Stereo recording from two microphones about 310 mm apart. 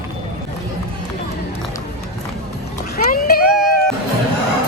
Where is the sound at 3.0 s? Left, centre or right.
Left.